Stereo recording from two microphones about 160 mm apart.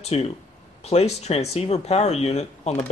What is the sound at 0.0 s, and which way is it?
Speech, 40° left (ahead or behind).